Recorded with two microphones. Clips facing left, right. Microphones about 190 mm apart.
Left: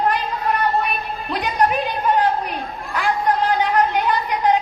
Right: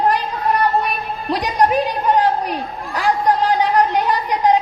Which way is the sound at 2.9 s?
35° right (ahead or behind).